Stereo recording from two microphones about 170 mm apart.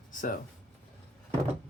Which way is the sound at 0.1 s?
50° left (ahead or behind).